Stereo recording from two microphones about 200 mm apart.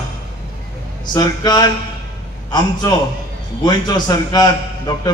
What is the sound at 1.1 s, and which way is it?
A man's voice, 20° left (ahead or behind).